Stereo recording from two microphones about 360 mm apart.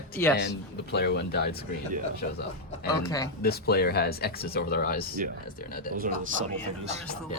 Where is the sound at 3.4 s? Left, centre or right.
Left.